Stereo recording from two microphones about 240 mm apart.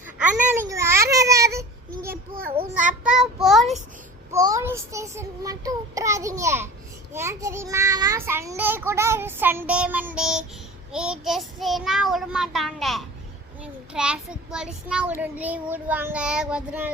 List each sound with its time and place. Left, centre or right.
0.2 s a sound: centre
0.7 s babbling: centre
2.0 s a sound: right
2.6 s child singing: right
3.0 s child singing: centre
4.3 s child singing: centre
13.6 s a child's voice: centre